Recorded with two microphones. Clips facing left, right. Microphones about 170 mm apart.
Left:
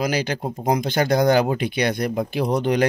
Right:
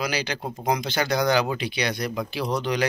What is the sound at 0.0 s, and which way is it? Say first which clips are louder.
A man's voice: left 5 dB; 50° left (ahead or behind).